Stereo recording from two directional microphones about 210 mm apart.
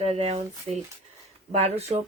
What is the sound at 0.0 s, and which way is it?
Speech, 30° right (ahead or behind).